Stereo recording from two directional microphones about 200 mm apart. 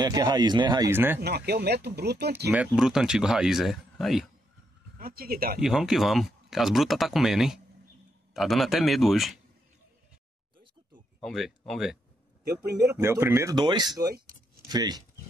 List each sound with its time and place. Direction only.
0.0 s speech: 20° right (ahead or behind)
1.2 s speech: 55° right (ahead or behind)
2.5 s speech: 5° right (ahead or behind)
4.9 s speech: 45° right (ahead or behind)
5.6 s speech: centre (ahead or behind)
11.1 s speech: centre (ahead or behind)
12.9 s speech: 10° right (ahead or behind)